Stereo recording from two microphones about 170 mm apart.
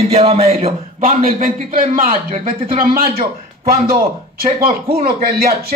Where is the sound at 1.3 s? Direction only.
55° right (ahead or behind).